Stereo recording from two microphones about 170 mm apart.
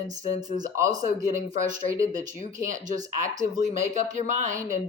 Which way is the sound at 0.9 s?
45° right (ahead or behind).